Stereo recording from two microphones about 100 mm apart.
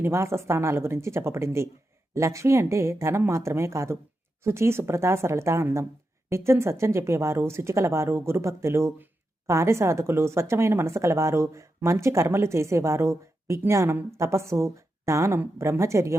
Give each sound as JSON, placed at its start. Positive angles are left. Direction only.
{"t": 0.0, "sound": "speech", "side_deg": -25}